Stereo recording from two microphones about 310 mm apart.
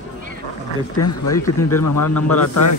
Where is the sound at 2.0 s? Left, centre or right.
Left.